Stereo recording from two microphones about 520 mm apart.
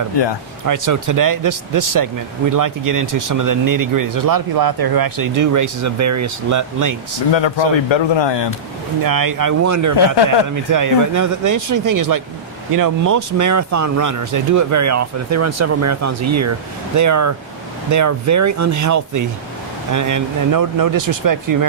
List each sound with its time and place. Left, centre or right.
0.7 s speech: right
7.9 s speech: left
9.0 s speech: right